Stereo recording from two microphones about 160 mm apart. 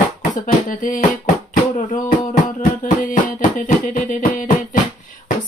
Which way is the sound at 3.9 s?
55° left (ahead or behind).